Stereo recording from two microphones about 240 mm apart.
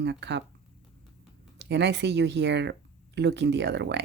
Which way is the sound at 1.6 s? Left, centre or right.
Right.